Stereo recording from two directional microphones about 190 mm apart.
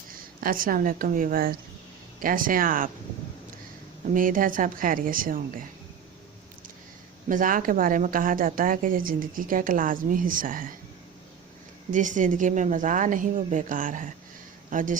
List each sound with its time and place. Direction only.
0.4 s speech: 45° right (ahead or behind)
4.1 s speech: 45° right (ahead or behind)
7.3 s speech: 45° right (ahead or behind)
11.9 s speech: 40° right (ahead or behind)